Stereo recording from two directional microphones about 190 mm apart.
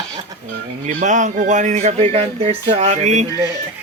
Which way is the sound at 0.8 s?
40° right (ahead or behind).